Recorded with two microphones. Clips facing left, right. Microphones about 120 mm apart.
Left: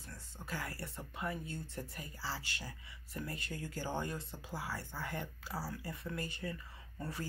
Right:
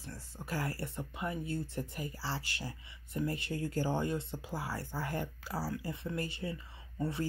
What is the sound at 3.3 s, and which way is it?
Speech, 25° right (ahead or behind).